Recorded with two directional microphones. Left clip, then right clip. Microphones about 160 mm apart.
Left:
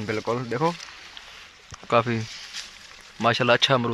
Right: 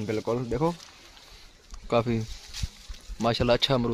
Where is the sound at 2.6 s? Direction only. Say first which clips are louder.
Left 2 dB; 10° right (ahead or behind).